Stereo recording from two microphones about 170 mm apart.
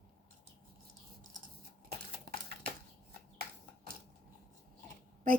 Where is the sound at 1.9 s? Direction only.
60° right (ahead or behind).